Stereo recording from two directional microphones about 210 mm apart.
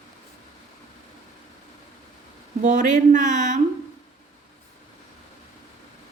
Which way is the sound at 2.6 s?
35° right (ahead or behind).